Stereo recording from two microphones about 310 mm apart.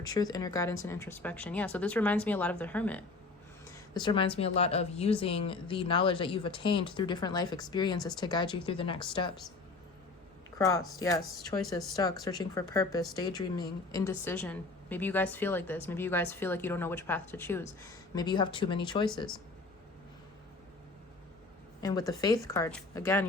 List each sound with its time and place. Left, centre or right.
0.0 s a woman's voice: centre
3.9 s a woman's voice: centre
10.6 s a woman's voice: centre
11.2 s speech: centre
12.2 s a woman's voice: centre
21.8 s a woman's voice: centre